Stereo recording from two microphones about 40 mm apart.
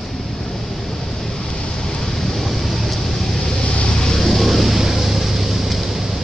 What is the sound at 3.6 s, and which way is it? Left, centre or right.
Vehicle, left.